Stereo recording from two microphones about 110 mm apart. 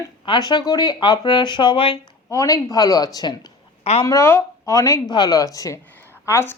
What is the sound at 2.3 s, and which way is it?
Speech, 30° left (ahead or behind).